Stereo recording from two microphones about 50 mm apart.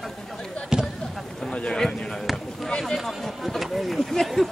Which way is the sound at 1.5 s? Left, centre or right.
Left.